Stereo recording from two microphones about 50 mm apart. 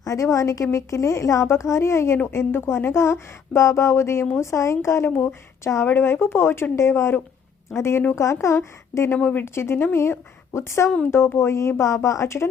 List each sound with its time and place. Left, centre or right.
0.1 s a woman's voice: left
5.8 s speech: left
6.7 s speech: left
8.1 s speech: left
9.2 s speech: left
10.0 s speech: left
11.8 s speech: left